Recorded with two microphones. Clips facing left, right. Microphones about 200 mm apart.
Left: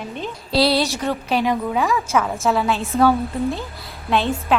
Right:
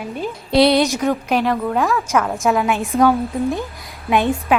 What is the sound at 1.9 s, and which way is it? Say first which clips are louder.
Speech: right 2 dB; centre (ahead or behind).